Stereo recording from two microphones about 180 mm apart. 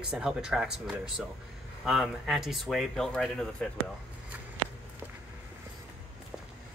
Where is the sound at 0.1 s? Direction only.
5° right (ahead or behind).